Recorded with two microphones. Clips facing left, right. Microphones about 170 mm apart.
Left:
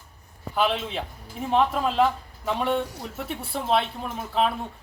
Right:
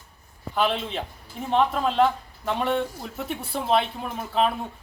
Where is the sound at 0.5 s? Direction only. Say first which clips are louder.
Even; centre (ahead or behind).